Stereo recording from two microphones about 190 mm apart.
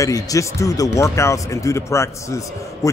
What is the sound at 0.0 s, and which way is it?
Speech, 15° left (ahead or behind).